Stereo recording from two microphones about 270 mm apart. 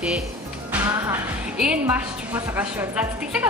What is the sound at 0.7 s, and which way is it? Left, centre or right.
A woman's voice, centre.